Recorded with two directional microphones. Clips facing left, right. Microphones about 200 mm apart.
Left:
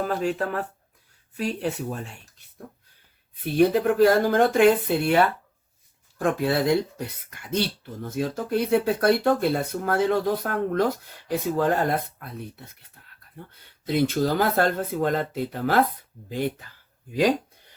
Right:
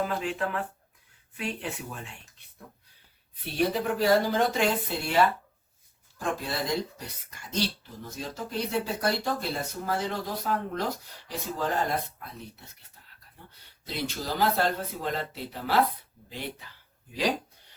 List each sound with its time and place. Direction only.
0.0 s speech: 45° left (ahead or behind)
13.8 s speech: 50° left (ahead or behind)